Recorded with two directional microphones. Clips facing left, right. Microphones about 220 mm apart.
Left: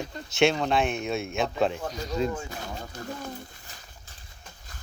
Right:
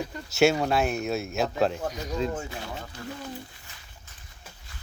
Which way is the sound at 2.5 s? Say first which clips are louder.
Even; 45° left (ahead or behind).